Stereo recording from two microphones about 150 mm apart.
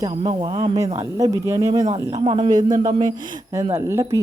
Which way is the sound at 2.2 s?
35° right (ahead or behind).